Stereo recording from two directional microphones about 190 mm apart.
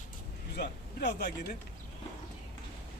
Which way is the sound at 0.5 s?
60° left (ahead or behind).